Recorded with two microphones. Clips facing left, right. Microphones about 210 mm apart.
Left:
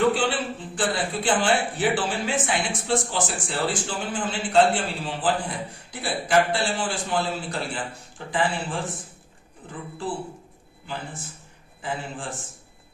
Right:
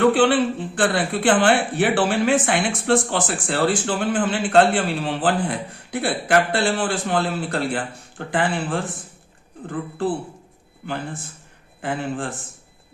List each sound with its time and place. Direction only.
0.1 s speech: 65° right (ahead or behind)
10.8 s speech: 60° right (ahead or behind)